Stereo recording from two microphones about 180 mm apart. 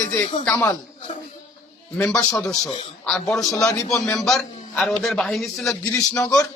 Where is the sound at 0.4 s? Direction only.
10° left (ahead or behind).